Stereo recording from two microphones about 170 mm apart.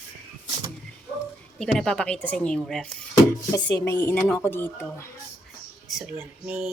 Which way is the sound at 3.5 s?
20° left (ahead or behind).